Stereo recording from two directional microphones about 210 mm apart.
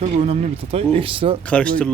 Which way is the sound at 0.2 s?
30° right (ahead or behind).